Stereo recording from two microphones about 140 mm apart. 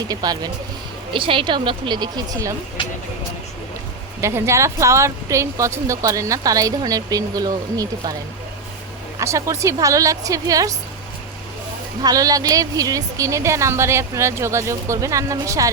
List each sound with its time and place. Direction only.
0.1 s a woman's voice: 30° right (ahead or behind)
4.2 s speech: 20° right (ahead or behind)
9.1 s speech: 20° right (ahead or behind)
12.0 s speech: 25° right (ahead or behind)